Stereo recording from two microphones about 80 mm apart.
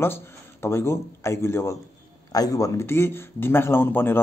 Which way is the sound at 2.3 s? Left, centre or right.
Left.